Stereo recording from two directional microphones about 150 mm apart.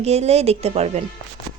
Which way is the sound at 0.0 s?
45° right (ahead or behind).